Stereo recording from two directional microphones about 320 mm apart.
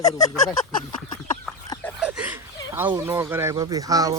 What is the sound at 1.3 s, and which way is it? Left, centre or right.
Chicken, centre.